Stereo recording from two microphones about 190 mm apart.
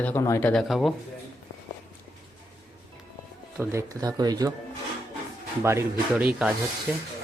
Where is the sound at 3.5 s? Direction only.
15° right (ahead or behind).